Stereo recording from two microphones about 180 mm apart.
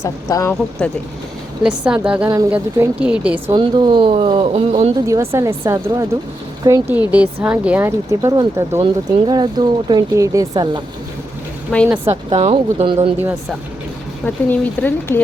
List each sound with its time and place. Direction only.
0.0 s speech: 15° left (ahead or behind)
1.6 s a woman's voice: 5° right (ahead or behind)
3.5 s speech: 25° right (ahead or behind)
5.0 s a woman's voice: 15° right (ahead or behind)
7.1 s a woman's voice: 10° right (ahead or behind)
11.7 s speech: 5° left (ahead or behind)
12.0 s a woman's voice: 35° right (ahead or behind)
14.3 s speech: 10° left (ahead or behind)